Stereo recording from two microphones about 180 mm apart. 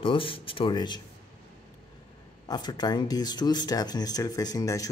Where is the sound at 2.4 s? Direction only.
25° left (ahead or behind).